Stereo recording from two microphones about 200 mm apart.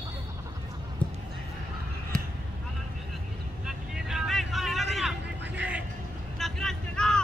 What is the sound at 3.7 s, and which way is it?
Vehicle, centre (ahead or behind).